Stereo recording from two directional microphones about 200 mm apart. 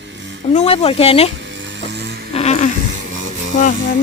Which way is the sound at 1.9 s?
55° right (ahead or behind).